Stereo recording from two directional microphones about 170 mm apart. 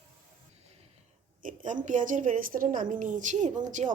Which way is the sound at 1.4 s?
50° right (ahead or behind).